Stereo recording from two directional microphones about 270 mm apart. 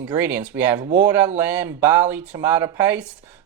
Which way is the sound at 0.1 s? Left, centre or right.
Centre.